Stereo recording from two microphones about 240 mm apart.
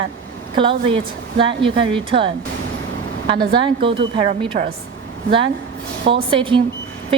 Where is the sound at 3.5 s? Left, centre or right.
Right.